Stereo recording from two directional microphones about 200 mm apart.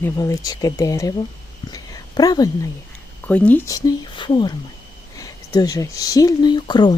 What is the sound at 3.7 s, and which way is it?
Speech, 20° left (ahead or behind).